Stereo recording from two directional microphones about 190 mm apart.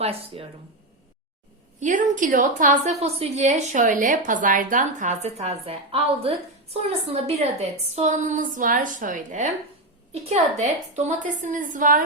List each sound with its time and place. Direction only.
0.0 s a woman's voice: 30° right (ahead or behind)
1.8 s a woman's voice: 40° right (ahead or behind)